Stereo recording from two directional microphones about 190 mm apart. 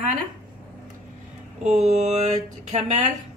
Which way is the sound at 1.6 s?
35° right (ahead or behind).